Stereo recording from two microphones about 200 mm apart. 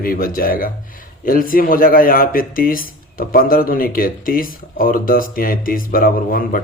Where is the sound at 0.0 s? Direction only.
45° left (ahead or behind).